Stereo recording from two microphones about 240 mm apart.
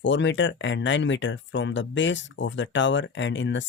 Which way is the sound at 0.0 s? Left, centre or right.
Left.